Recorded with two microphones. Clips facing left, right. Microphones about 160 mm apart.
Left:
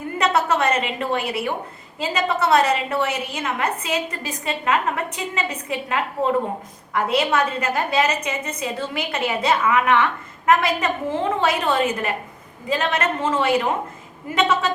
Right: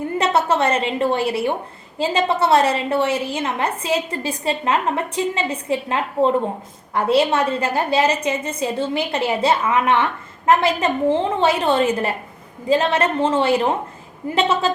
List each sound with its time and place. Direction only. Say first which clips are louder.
0.2 s a woman's voice: right 1 dB; 30° right (ahead or behind)